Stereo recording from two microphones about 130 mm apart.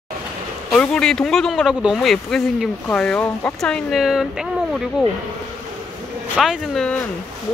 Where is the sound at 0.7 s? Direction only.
5° left (ahead or behind).